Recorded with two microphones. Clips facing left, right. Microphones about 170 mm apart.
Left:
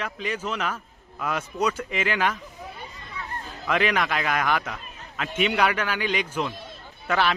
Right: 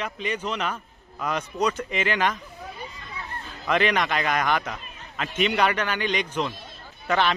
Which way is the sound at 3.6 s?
5° left (ahead or behind).